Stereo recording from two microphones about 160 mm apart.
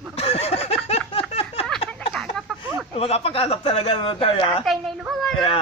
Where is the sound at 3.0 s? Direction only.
40° left (ahead or behind).